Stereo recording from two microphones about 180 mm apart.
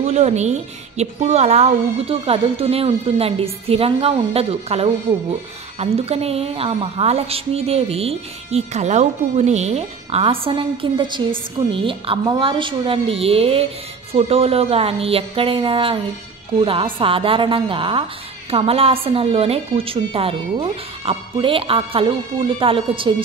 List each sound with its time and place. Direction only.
0.0 s a woman's voice: 40° right (ahead or behind)